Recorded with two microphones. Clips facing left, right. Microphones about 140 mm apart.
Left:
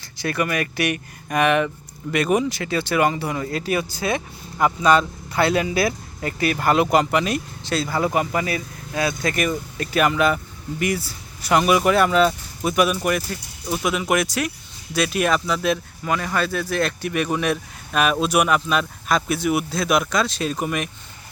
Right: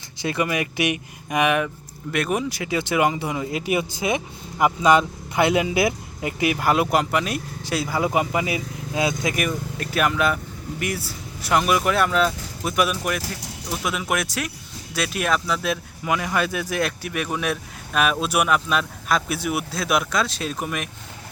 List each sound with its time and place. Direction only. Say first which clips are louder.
0.2 s speech: even; 20° right (ahead or behind); by 2.6 s centre (ahead or behind)
2.6 s speech: left 1 dB; 15° right (ahead or behind)
6.6 s speech: left 4 dB; 5° right (ahead or behind)
16.0 s speech: even; 10° right (ahead or behind)